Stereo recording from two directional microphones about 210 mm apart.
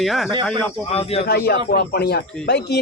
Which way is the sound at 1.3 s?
50° left (ahead or behind).